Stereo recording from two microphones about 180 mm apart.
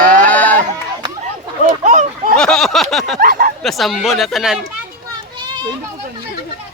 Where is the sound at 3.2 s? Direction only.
55° right (ahead or behind).